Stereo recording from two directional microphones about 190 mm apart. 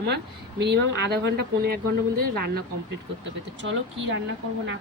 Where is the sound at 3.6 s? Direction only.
85° right.